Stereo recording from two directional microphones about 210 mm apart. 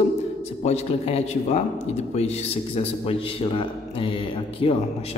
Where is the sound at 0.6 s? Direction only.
30° left (ahead or behind).